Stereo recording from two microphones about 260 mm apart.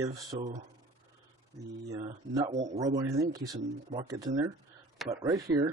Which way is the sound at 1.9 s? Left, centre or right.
Centre.